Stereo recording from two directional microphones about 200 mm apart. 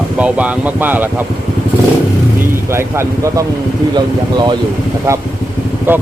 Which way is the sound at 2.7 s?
15° right (ahead or behind).